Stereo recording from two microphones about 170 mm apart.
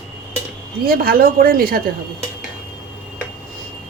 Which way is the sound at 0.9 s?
60° right (ahead or behind).